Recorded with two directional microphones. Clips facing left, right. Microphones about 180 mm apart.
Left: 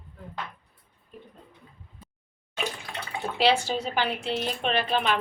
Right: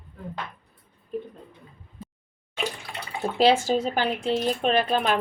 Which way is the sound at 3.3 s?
45° right (ahead or behind).